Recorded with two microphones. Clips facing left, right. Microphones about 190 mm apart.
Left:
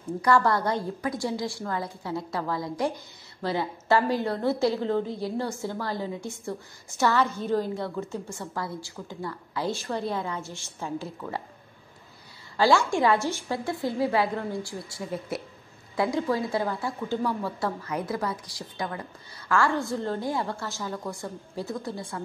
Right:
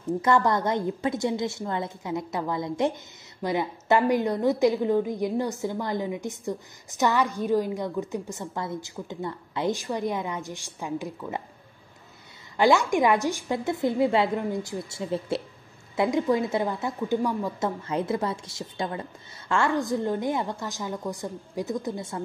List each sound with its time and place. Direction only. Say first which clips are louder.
0.2 s a woman's voice: left 1 dB; 20° right (ahead or behind)
12.5 s a woman's voice: right 1 dB; 20° right (ahead or behind)